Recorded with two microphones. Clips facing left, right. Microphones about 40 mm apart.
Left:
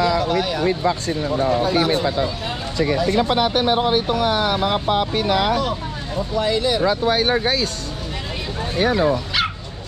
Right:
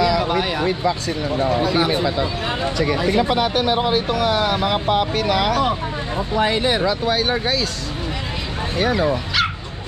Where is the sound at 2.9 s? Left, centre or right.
Right.